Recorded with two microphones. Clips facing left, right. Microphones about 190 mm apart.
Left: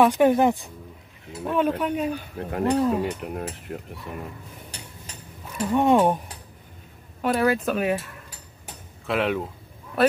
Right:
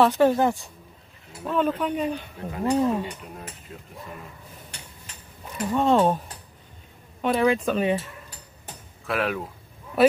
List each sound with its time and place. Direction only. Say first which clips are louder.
0.0 s speech: left 1 dB; 15° left (ahead or behind)
3.2 s speech: left 9 dB; 65° left (ahead or behind)
5.7 s speech: left 1 dB; 15° left (ahead or behind)
9.0 s speech: left 2 dB; 25° left (ahead or behind)
10.0 s speech: right 2 dB; centre (ahead or behind)